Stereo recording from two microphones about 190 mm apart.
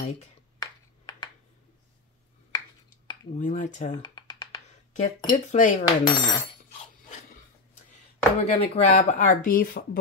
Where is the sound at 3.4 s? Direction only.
40° left (ahead or behind).